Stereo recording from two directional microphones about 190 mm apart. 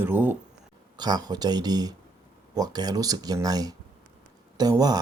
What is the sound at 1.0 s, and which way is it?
Speech, 20° right (ahead or behind).